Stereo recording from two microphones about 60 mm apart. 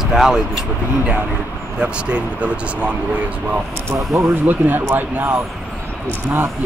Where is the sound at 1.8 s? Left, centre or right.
Centre; by 5.3 s right.